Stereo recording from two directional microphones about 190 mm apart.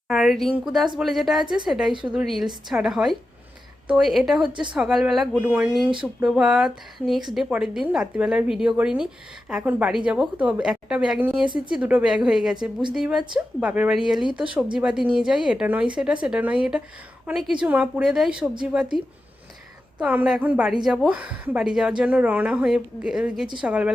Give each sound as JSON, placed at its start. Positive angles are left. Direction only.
{"t": 0.1, "sound": "a woman's voice", "side_deg": 0}
{"t": 11.4, "sound": "speech", "side_deg": -25}
{"t": 11.7, "sound": "a woman's voice", "side_deg": -5}
{"t": 20.0, "sound": "a woman's voice", "side_deg": -5}